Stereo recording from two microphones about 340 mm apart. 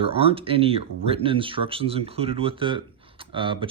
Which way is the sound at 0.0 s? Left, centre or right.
Centre.